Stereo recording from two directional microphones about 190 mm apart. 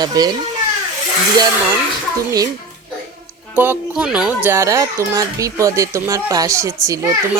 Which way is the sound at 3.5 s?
10° right (ahead or behind).